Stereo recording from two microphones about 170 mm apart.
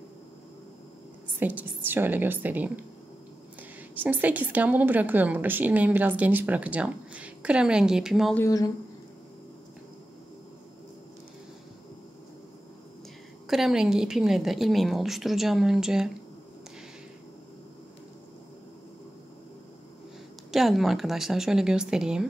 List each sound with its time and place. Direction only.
1.4 s a woman's voice: 10° right (ahead or behind)
4.0 s a woman's voice: 10° right (ahead or behind)
8.4 s speech: 20° left (ahead or behind)
13.5 s a woman's voice: centre (ahead or behind)
20.5 s a woman's voice: centre (ahead or behind)